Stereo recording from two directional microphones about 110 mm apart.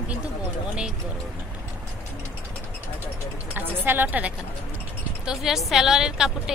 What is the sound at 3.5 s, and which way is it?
Speech, 15° right (ahead or behind).